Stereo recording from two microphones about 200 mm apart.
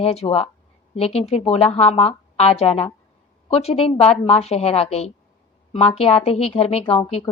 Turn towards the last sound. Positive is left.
turn(degrees=30)  # may be behind; listen again after turning